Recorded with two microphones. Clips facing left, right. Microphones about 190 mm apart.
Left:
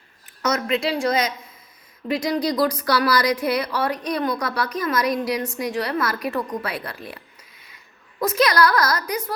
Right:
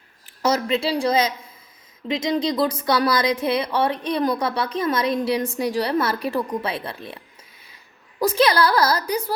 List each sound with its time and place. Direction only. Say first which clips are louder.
0.4 s a woman's voice: right 1 dB; 30° right (ahead or behind)
8.2 s a woman's voice: right 1 dB; 30° right (ahead or behind)